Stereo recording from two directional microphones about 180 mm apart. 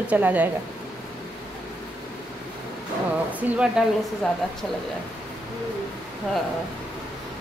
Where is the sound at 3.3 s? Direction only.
5° right (ahead or behind).